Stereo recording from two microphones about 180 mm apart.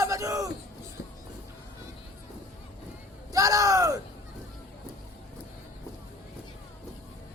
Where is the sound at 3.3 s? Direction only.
20° right (ahead or behind).